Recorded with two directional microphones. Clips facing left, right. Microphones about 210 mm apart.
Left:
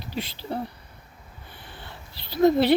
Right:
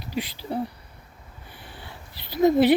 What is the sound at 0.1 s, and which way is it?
Speech, 10° right (ahead or behind).